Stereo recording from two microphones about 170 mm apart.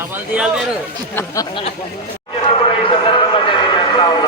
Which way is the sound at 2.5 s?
30° left (ahead or behind).